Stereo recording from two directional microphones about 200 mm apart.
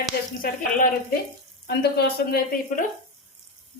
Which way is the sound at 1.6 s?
55° left (ahead or behind).